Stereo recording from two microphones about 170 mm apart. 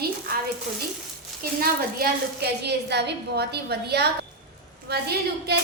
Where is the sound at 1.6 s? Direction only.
65° right (ahead or behind).